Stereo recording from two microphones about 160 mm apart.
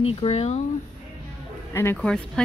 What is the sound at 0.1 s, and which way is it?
Speech, 40° left (ahead or behind).